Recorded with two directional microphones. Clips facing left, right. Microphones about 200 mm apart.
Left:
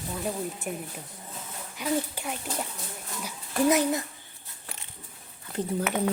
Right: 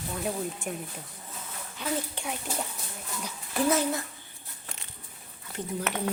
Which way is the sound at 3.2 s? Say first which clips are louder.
Left 3 dB; 15° left (ahead or behind).